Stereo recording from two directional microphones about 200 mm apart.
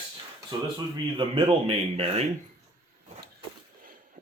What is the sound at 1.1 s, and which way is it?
Speech, 30° right (ahead or behind).